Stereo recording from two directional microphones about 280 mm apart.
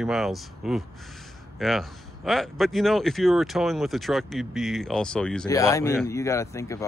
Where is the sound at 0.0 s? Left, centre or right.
Centre.